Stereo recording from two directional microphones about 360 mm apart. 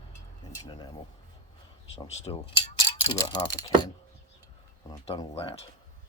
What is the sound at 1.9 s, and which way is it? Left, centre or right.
Speech, centre.